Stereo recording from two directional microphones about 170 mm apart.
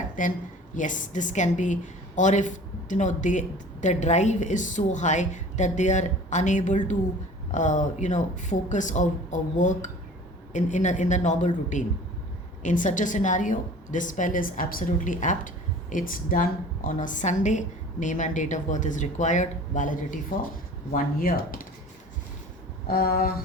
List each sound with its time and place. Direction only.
0.2 s a woman's voice: 50° left (ahead or behind)
22.9 s speech: 60° left (ahead or behind)